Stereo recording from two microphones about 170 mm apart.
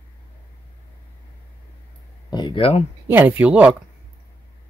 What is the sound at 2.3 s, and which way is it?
Speech, 25° left (ahead or behind).